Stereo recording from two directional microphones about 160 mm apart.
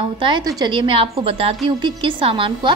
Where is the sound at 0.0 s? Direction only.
30° right (ahead or behind).